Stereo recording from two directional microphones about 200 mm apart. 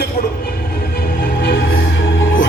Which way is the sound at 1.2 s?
50° left (ahead or behind).